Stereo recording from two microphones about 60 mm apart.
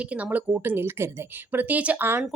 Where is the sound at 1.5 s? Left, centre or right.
Right.